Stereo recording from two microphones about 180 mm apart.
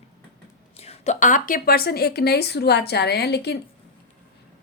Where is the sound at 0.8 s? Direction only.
35° left (ahead or behind); by 3.6 s 65° left (ahead or behind).